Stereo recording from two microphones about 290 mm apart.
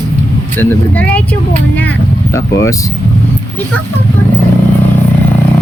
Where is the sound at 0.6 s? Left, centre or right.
Centre.